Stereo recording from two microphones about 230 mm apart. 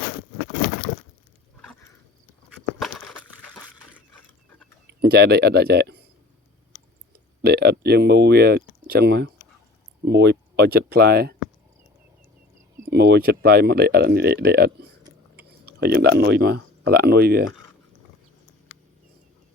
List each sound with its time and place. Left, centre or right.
2.7 s a sound: centre
4.9 s speech: right
7.4 s speech: right
12.9 s speech: right